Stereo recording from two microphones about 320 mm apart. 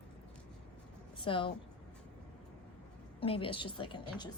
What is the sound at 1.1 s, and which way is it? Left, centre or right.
Speech, centre.